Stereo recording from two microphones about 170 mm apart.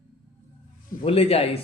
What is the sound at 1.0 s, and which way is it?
Speech, 35° left (ahead or behind).